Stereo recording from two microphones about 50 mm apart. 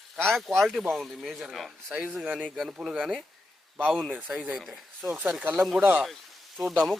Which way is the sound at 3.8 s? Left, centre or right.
Centre.